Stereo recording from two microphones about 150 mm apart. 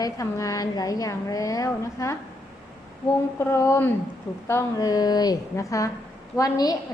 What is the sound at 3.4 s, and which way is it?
A woman's voice, 20° left (ahead or behind).